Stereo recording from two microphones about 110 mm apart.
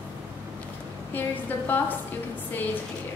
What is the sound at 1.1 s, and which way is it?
Speech, 15° left (ahead or behind).